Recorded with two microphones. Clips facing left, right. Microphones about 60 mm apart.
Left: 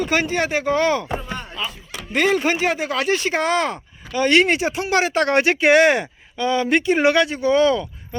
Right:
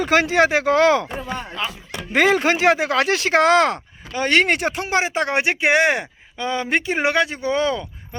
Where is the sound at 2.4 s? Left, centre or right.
Right.